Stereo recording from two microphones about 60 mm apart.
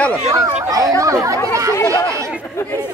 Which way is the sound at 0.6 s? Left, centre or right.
Right.